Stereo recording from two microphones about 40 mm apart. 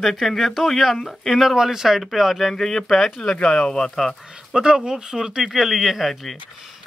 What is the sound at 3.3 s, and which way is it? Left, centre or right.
Speech, left.